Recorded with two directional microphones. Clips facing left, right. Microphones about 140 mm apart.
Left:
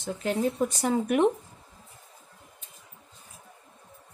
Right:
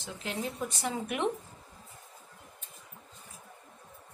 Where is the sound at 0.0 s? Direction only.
45° left (ahead or behind).